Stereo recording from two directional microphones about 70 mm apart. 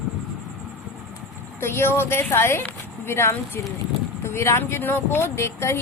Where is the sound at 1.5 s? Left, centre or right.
Left.